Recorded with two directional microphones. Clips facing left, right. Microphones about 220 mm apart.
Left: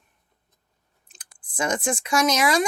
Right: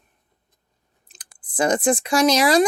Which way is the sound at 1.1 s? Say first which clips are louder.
Right 1 dB; 35° right (ahead or behind).